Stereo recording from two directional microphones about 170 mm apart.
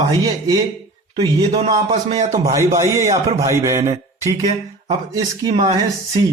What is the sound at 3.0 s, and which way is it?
Speech, 40° right (ahead or behind).